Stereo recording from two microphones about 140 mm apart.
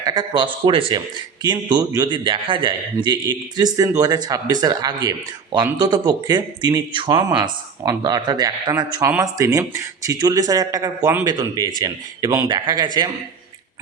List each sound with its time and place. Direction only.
0.0 s speech: 30° right (ahead or behind)